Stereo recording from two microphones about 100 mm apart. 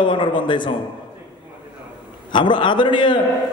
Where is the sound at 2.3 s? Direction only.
55° left (ahead or behind).